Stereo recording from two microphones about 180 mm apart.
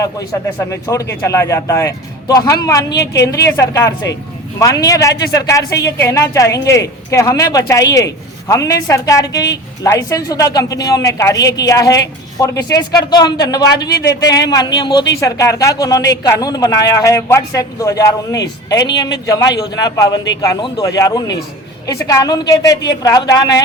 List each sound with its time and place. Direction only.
0.7 s a woman's voice: 15° left (ahead or behind)